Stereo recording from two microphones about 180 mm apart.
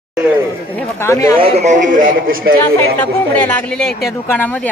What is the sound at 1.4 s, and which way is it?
Speech, 35° right (ahead or behind).